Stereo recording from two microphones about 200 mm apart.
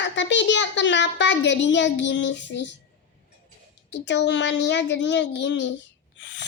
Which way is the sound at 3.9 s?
60° left (ahead or behind).